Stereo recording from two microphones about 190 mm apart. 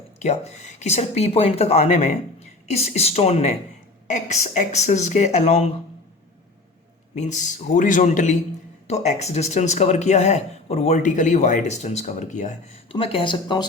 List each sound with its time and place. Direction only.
0.2 s speech: 35° left (ahead or behind)
7.2 s speech: 40° left (ahead or behind)
12.9 s speech: 30° left (ahead or behind)